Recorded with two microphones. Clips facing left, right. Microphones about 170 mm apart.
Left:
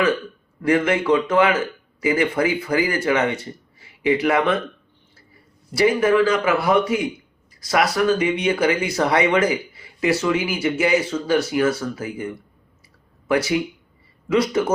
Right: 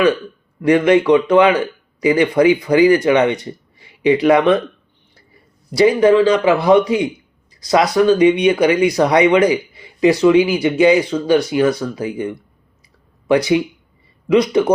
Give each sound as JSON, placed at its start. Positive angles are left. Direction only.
{"t": 0.6, "sound": "speech", "side_deg": -20}
{"t": 5.8, "sound": "speech", "side_deg": -20}
{"t": 13.2, "sound": "speech", "side_deg": -20}